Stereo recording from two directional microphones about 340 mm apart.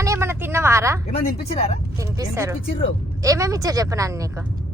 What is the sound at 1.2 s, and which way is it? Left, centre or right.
Speech, centre.